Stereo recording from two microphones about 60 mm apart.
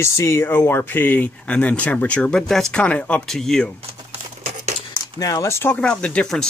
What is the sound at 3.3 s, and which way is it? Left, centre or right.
Speech, centre.